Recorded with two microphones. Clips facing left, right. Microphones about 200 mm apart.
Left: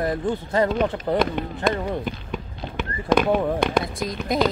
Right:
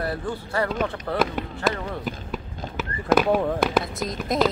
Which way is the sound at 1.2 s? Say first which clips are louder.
Right 1 dB; 5° right (ahead or behind).